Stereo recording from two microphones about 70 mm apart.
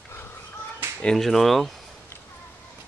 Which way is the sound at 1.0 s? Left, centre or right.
Centre.